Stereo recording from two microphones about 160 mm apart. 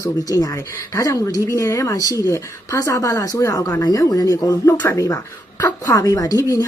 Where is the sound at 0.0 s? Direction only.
20° left (ahead or behind).